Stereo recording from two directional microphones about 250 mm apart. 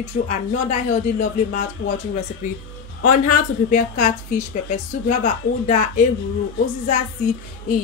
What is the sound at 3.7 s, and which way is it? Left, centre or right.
A woman's voice, left.